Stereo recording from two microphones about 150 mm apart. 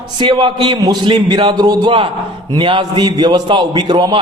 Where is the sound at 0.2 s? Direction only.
30° right (ahead or behind).